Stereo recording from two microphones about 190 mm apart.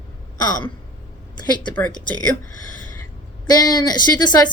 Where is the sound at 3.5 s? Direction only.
20° left (ahead or behind).